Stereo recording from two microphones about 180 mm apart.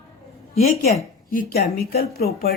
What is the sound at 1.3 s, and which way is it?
Speech, 55° left (ahead or behind).